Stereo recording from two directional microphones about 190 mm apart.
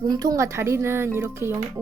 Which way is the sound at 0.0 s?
20° right (ahead or behind).